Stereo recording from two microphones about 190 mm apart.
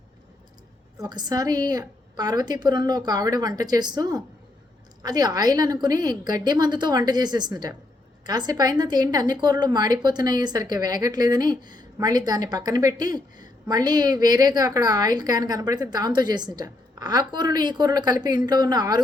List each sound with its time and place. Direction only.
0.9 s a woman's voice: 20° right (ahead or behind)